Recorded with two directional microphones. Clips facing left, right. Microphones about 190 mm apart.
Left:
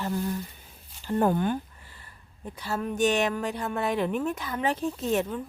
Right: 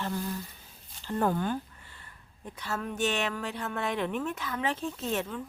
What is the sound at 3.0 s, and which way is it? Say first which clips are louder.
Speech: left 6 dB; 40° left (ahead or behind).